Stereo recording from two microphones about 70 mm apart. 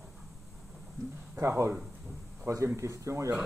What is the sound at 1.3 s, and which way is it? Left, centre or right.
A man's voice, right.